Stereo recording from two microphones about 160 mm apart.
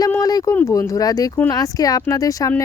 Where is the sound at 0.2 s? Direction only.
25° left (ahead or behind).